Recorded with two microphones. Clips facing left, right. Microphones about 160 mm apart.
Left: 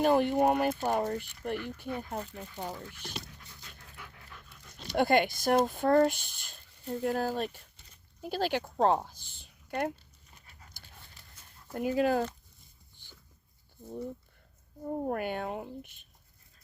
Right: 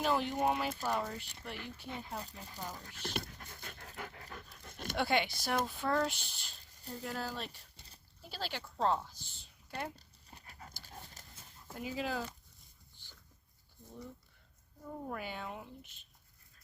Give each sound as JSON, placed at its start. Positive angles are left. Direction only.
{"t": 0.0, "sound": "speech", "side_deg": 50}
{"t": 3.0, "sound": "pant", "side_deg": -55}
{"t": 4.9, "sound": "speech", "side_deg": 50}
{"t": 9.9, "sound": "dog", "side_deg": -35}
{"t": 11.7, "sound": "speech", "side_deg": 55}
{"t": 14.8, "sound": "speech", "side_deg": 50}